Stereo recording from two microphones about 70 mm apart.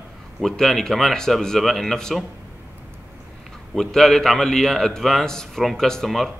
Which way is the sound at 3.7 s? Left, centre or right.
Centre.